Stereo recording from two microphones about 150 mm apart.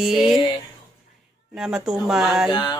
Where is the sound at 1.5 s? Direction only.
5° right (ahead or behind).